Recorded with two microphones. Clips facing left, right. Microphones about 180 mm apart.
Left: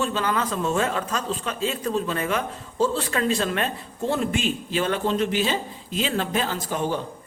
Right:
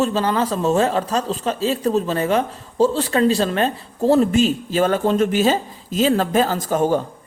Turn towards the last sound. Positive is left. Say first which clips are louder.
# right 8 dB
turn(degrees=-45)  # may be behind; listen again after turning